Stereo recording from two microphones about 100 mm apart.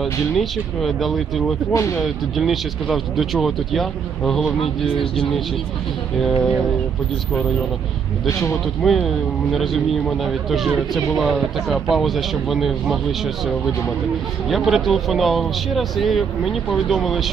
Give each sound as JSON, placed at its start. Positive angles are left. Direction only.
{"t": 0.0, "sound": "speech", "side_deg": 0}
{"t": 1.7, "sound": "speech", "side_deg": 30}
{"t": 2.0, "sound": "speech", "side_deg": 0}
{"t": 8.4, "sound": "speech", "side_deg": 0}
{"t": 14.5, "sound": "speech", "side_deg": 0}